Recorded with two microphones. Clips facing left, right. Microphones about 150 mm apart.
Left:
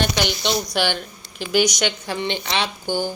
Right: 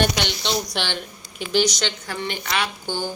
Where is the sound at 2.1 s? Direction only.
25° left (ahead or behind).